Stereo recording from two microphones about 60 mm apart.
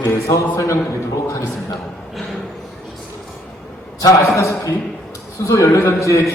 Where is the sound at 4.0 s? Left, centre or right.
Left.